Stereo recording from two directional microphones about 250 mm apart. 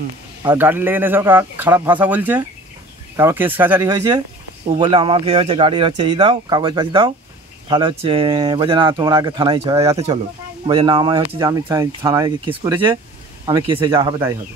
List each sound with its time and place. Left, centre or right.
0.4 s speech: centre